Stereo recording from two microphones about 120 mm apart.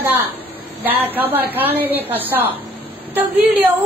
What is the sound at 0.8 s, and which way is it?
A woman's voice, 15° right (ahead or behind).